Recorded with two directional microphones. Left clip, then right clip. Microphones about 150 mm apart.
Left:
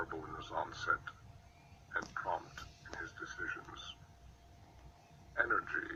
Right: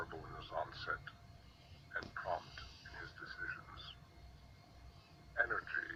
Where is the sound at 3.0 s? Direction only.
25° left (ahead or behind).